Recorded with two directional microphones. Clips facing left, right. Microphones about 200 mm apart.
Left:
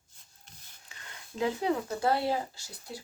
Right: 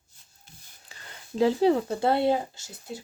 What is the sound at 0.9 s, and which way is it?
Speech, 35° right (ahead or behind).